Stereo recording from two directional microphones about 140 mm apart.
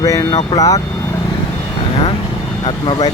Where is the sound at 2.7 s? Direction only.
30° left (ahead or behind).